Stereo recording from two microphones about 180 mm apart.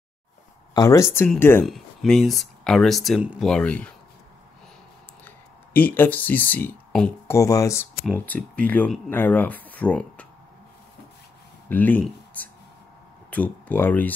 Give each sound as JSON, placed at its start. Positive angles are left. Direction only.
{"t": 0.7, "sound": "speech", "side_deg": 15}
{"t": 5.2, "sound": "speech", "side_deg": 10}
{"t": 7.2, "sound": "speech", "side_deg": 15}
{"t": 11.7, "sound": "speech", "side_deg": 10}